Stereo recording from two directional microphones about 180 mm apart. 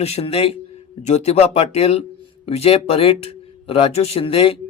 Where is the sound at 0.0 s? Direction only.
35° left (ahead or behind).